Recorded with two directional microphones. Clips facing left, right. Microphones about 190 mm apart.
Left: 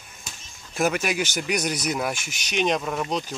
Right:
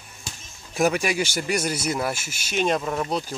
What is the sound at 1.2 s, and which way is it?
Speech, 5° right (ahead or behind).